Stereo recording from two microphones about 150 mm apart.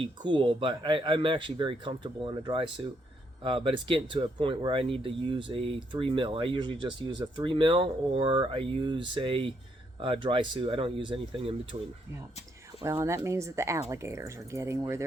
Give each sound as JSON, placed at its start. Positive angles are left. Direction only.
{"t": 0.0, "sound": "speech", "side_deg": -35}
{"t": 12.8, "sound": "speech", "side_deg": -20}